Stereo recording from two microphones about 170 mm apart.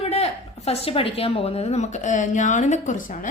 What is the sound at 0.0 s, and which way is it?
A woman's voice, 35° left (ahead or behind).